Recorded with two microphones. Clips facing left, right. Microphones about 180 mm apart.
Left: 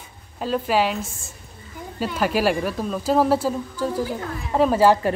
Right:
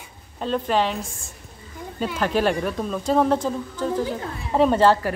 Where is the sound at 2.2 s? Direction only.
5° left (ahead or behind).